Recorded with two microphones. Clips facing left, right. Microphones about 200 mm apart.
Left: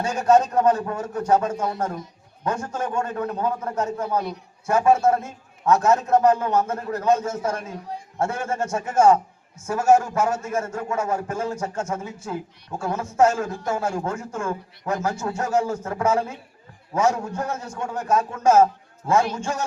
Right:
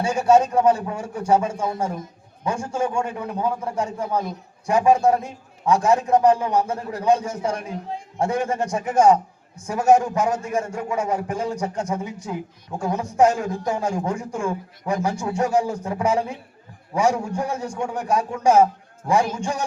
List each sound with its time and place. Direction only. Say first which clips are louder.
0.0 s a man's voice: right 1 dB; 10° right (ahead or behind)